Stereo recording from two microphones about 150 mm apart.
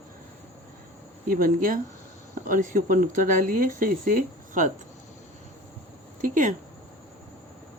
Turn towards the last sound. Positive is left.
turn(degrees=-60)  # may be behind; listen again after turning